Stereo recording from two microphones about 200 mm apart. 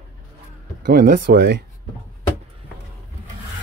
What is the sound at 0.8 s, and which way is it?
Speech, 50° right (ahead or behind).